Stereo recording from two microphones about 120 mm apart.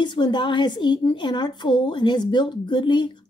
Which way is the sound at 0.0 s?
40° left (ahead or behind).